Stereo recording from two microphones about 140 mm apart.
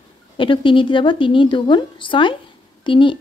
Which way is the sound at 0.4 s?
40° left (ahead or behind).